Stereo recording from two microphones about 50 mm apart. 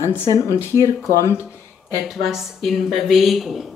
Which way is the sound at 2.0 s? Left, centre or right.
Centre.